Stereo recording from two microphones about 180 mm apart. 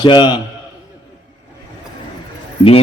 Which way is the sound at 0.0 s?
25° left (ahead or behind).